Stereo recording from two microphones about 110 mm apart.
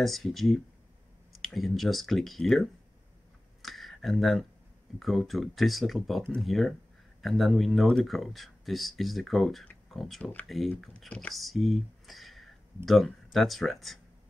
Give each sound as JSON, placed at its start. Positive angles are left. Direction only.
{"t": 0.0, "sound": "speech", "side_deg": 0}
{"t": 3.6, "sound": "a sound", "side_deg": 0}
{"t": 4.9, "sound": "speech", "side_deg": 0}